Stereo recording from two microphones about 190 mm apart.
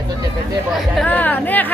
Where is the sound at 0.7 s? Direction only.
Centre (ahead or behind).